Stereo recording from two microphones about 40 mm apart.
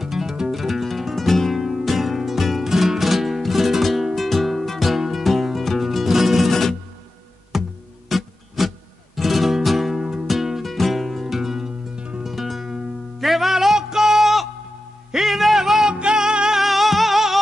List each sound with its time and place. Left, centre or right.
0.0 s music: centre
1.6 s music: centre
7.5 s music: centre
11.9 s music: right
12.2 s music: centre
15.9 s music: right
16.6 s music: centre